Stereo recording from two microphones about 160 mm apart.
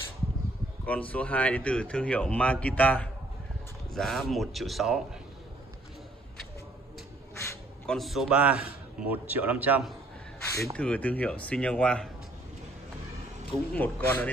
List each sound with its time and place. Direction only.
0.8 s speech: 10° left (ahead or behind)
7.8 s a man's voice: centre (ahead or behind)
10.4 s a sound: 20° left (ahead or behind)
10.8 s speech: 10° left (ahead or behind)
13.7 s speech: 10° left (ahead or behind)